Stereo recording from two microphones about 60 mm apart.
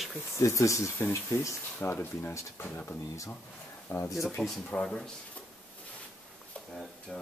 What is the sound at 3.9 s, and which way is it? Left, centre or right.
Speech, left.